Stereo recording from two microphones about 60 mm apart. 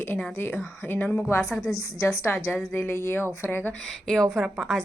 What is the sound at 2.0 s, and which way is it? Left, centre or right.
A woman's voice, left.